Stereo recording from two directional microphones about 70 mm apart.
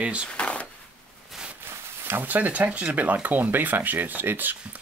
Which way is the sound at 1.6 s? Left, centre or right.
Right.